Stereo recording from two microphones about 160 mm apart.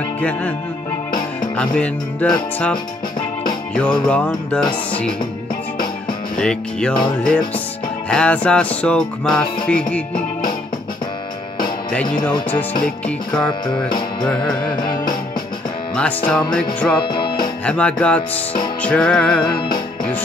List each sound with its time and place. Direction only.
0.2 s music: 10° left (ahead or behind)
1.6 s music: 5° left (ahead or behind)
6.3 s music: 5° left (ahead or behind)
11.9 s music: 5° left (ahead or behind)
13.7 s music: 30° left (ahead or behind)
16.5 s music: 5° left (ahead or behind)
17.0 s music: 30° left (ahead or behind)
17.6 s music: 5° left (ahead or behind)